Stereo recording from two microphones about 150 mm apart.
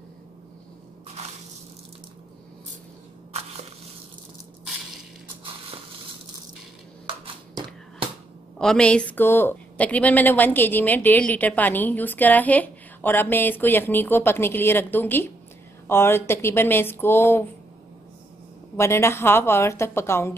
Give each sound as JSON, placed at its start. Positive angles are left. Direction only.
{"t": 8.5, "sound": "a woman's voice", "side_deg": 5}
{"t": 18.8, "sound": "a woman's voice", "side_deg": 15}